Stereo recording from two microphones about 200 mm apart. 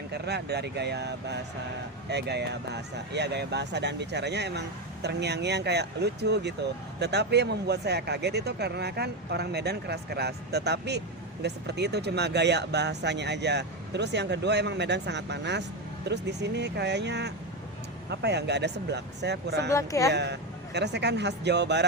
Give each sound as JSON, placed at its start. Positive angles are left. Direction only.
{"t": 0.1, "sound": "speech", "side_deg": -55}
{"t": 19.7, "sound": "speech", "side_deg": 15}
{"t": 20.1, "sound": "speech", "side_deg": -60}